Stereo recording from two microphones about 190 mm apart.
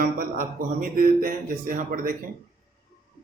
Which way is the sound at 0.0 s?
50° right (ahead or behind).